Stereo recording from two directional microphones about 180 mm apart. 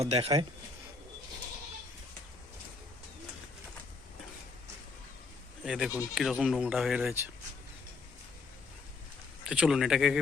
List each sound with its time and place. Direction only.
0.0 s a man's voice: 35° right (ahead or behind)
5.6 s speech: 5° right (ahead or behind)
9.4 s speech: 5° right (ahead or behind)